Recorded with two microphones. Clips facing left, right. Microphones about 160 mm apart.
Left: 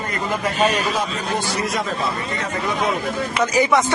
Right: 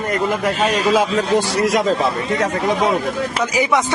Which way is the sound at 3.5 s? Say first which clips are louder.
Left 1 dB; 15° right (ahead or behind).